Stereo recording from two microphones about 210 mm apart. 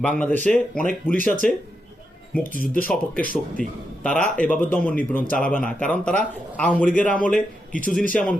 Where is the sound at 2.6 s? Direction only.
45° left (ahead or behind).